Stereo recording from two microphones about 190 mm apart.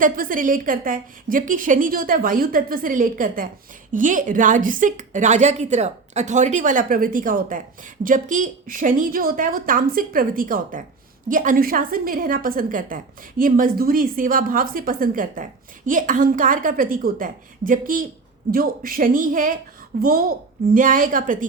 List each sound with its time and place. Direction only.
0.0 s a woman's voice: 45° right (ahead or behind)